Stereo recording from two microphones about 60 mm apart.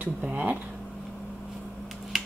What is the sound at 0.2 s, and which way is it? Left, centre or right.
Speech, right.